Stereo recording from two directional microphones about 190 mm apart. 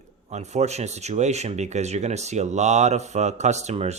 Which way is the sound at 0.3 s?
35° right (ahead or behind).